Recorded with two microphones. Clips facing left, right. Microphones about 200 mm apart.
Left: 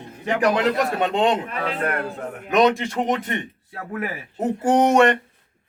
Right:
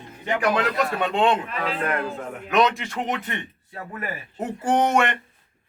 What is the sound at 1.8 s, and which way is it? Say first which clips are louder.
Speech: even; 50° left (ahead or behind).